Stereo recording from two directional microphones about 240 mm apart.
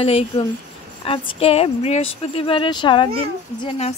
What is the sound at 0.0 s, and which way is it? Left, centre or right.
Speech, left.